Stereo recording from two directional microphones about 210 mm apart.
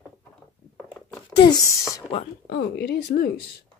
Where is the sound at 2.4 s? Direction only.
50° left (ahead or behind).